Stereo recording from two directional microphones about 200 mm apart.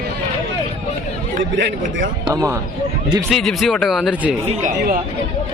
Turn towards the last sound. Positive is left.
turn(degrees=-40)  # may be behind; listen again after turning